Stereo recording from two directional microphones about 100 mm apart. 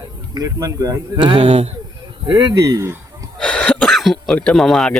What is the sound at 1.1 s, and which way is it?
Speech, 55° right (ahead or behind).